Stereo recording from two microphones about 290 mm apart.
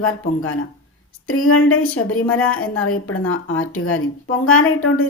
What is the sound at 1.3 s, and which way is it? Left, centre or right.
Speech, left.